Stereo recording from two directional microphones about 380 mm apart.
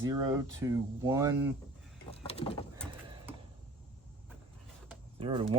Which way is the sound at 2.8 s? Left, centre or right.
Centre.